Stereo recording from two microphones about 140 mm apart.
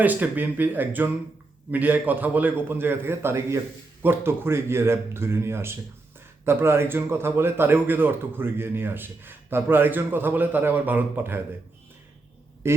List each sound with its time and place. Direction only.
0.0 s a man's voice: 10° right (ahead or behind)
12.6 s a man's voice: 20° right (ahead or behind)